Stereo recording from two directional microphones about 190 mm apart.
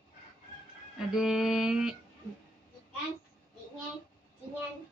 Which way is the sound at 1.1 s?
Centre (ahead or behind).